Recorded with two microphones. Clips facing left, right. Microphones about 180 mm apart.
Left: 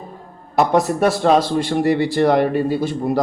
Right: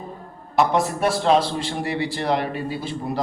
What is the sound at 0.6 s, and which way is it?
A man's voice, 40° left (ahead or behind).